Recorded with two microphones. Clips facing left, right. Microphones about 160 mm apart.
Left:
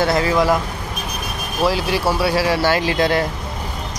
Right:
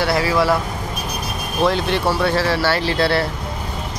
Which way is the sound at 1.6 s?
5° left (ahead or behind).